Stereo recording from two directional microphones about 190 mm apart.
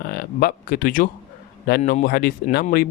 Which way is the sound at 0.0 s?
55° left (ahead or behind).